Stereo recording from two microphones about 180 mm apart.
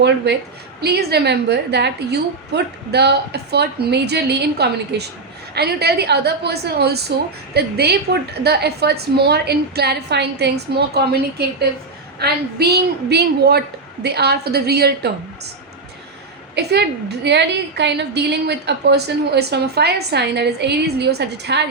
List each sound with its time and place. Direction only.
0.3 s a woman's voice: 70° right (ahead or behind)
16.6 s a woman's voice: 65° right (ahead or behind)